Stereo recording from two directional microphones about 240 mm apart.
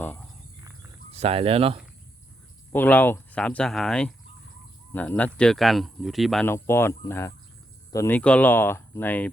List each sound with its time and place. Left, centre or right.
1.1 s speech: right
2.7 s speech: centre